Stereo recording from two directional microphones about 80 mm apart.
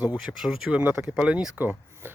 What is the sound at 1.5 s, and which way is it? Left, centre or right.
Speech, right.